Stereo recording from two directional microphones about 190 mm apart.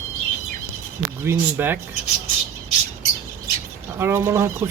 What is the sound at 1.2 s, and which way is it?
Speech, 10° right (ahead or behind).